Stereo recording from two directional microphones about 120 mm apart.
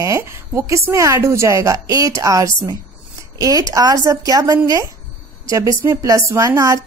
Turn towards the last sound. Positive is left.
turn(degrees=-25)  # may be behind; listen again after turning